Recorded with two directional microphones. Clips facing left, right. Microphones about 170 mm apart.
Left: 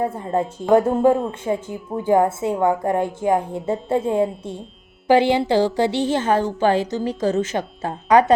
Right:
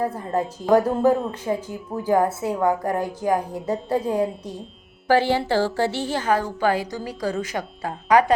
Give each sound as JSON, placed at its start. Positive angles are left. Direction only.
{"t": 0.0, "sound": "a woman's voice", "side_deg": 25}